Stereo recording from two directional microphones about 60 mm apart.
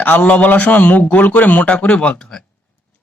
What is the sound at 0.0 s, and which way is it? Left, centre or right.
A man's voice, left.